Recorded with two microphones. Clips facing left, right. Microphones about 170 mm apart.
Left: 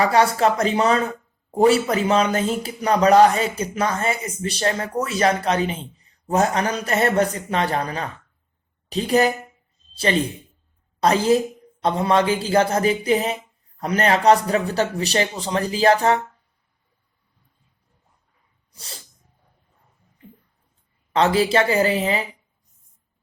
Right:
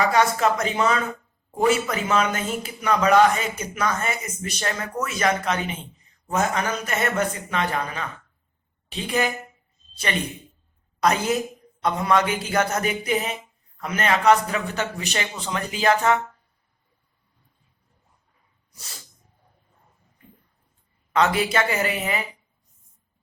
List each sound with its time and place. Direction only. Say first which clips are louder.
0.1 s a man's voice: left 3 dB; 35° left (ahead or behind)
18.7 s dog: left 5 dB; 30° left (ahead or behind)
21.1 s speech: left 3 dB; 30° left (ahead or behind)